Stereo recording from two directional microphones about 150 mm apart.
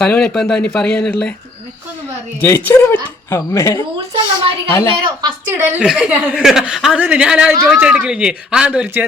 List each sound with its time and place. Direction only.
0.0 s speech: 5° left (ahead or behind)
2.4 s speech: 15° left (ahead or behind)
5.5 s a woman's voice: 15° right (ahead or behind)